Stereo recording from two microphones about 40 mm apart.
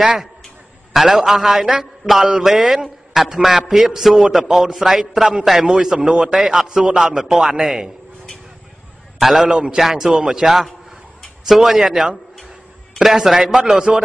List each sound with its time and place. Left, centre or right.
0.0 s a man's voice: centre
6.8 s a man's voice: right
7.2 s a man's voice: centre
9.2 s a man's voice: centre